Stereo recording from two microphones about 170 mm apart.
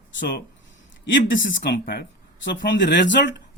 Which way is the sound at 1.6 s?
75° left (ahead or behind).